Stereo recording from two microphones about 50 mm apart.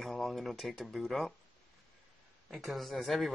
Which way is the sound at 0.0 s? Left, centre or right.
Centre.